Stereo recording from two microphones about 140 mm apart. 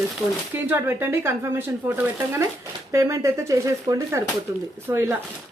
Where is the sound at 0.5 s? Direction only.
15° right (ahead or behind).